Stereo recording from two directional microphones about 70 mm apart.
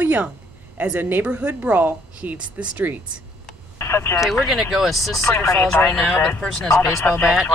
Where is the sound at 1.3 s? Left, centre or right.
Centre.